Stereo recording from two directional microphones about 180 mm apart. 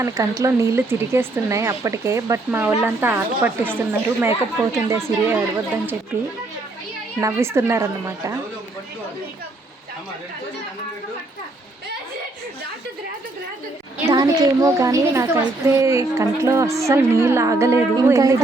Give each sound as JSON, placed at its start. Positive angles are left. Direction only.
{"t": 0.0, "sound": "a woman's voice", "side_deg": -20}
{"t": 7.2, "sound": "a woman's voice", "side_deg": -15}
{"t": 14.1, "sound": "a woman's voice", "side_deg": -20}